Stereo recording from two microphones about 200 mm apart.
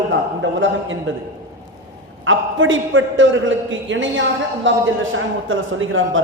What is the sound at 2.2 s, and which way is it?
Speech, 75° right (ahead or behind).